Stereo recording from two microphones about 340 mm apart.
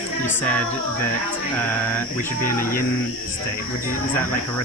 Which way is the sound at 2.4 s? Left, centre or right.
Left.